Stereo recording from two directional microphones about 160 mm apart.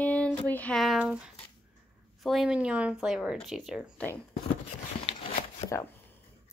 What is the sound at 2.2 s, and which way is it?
Speech, centre (ahead or behind).